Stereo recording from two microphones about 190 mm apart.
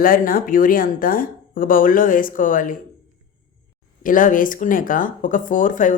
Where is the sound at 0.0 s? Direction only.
50° left (ahead or behind).